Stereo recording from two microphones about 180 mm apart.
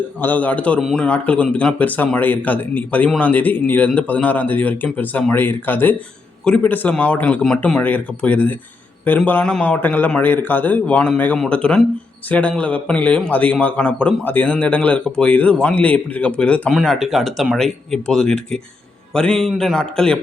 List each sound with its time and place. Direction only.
0.2 s speech: 10° left (ahead or behind)